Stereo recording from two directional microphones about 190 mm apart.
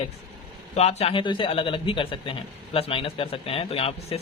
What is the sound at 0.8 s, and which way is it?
A man's voice, 35° left (ahead or behind).